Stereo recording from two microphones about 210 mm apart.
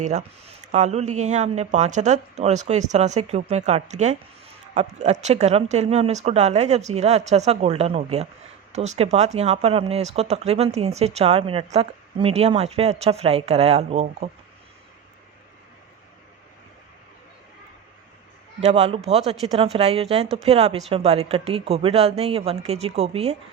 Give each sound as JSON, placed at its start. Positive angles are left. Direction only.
{"t": 0.0, "sound": "speech", "side_deg": -30}
{"t": 18.6, "sound": "speech", "side_deg": -30}